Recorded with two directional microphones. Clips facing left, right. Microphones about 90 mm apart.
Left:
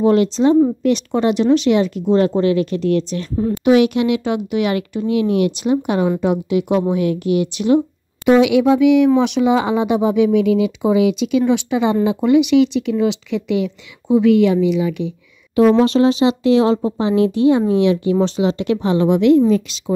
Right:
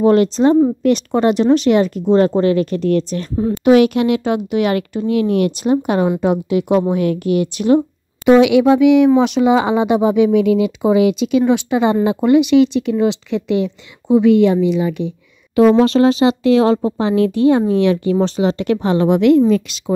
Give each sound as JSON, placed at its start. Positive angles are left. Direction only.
{"t": 0.0, "sound": "speech", "side_deg": -45}
{"t": 8.3, "sound": "speech", "side_deg": -70}
{"t": 11.2, "sound": "speech", "side_deg": -45}
{"t": 12.2, "sound": "speech", "side_deg": -45}